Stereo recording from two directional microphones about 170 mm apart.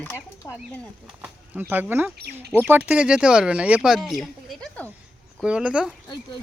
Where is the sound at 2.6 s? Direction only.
10° right (ahead or behind); by 4.9 s 5° left (ahead or behind).